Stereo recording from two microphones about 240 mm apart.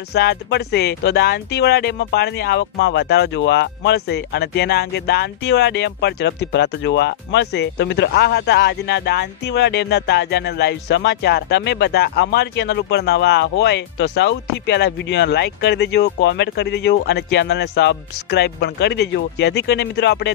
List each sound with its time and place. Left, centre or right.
0.1 s speech: left